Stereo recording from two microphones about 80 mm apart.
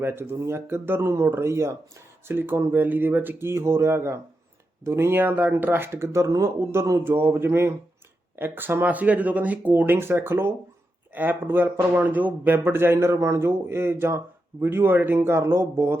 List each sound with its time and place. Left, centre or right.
0.0 s speech: right